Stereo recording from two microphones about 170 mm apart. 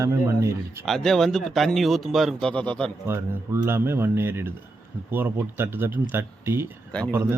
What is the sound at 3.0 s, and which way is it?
Speech, 15° right (ahead or behind).